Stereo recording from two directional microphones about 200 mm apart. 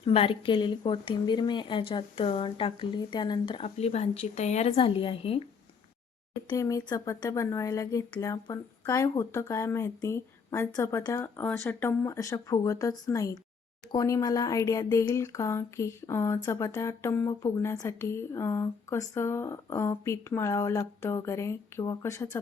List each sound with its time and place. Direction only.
0.0 s speech: 30° left (ahead or behind)
6.5 s speech: 15° left (ahead or behind)